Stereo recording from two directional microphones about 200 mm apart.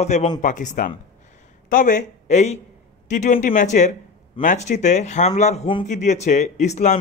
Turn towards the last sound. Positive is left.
turn(degrees=35)  # may be behind; listen again after turning